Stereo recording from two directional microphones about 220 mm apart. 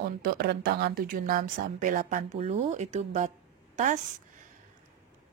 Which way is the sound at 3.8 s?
35° right (ahead or behind).